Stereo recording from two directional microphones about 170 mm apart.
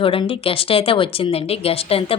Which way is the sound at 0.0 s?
30° left (ahead or behind).